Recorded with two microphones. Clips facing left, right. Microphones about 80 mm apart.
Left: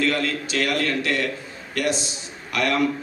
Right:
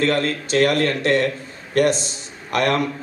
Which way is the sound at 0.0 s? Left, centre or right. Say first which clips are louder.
Right 3 dB; right.